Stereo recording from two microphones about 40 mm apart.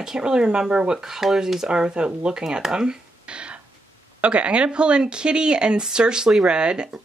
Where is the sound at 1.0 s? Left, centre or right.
Centre.